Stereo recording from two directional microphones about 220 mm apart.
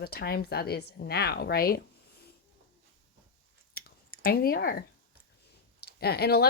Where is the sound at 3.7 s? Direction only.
45° left (ahead or behind).